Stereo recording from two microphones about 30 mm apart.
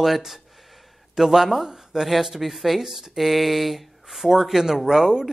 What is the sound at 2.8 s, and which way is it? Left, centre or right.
Speech, centre.